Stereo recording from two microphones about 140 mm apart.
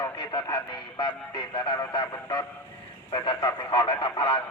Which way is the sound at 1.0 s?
35° left (ahead or behind).